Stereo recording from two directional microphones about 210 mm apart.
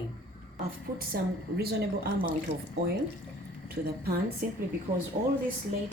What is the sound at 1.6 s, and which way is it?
Speech, 45° right (ahead or behind).